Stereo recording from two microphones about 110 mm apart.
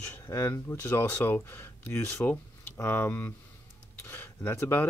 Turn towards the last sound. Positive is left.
turn(degrees=25)  # may be behind; listen again after turning